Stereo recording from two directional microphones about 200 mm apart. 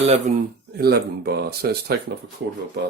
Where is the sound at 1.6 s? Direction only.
50° right (ahead or behind).